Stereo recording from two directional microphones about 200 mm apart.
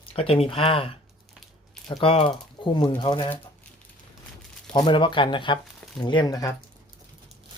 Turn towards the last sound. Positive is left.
turn(degrees=20)  # may be behind; listen again after turning